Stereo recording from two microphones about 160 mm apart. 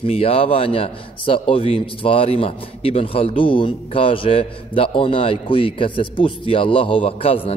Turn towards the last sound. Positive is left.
turn(degrees=35)  # may be behind; listen again after turning